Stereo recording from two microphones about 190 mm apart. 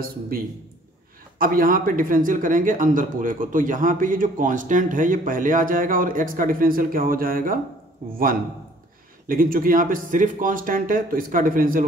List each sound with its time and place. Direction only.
1.4 s a man's voice: 50° right (ahead or behind)
9.3 s a man's voice: 50° right (ahead or behind)